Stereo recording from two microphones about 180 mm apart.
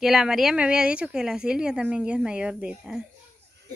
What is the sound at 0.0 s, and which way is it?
Speech, centre (ahead or behind).